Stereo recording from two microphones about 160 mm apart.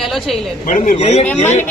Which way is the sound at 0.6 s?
55° left (ahead or behind).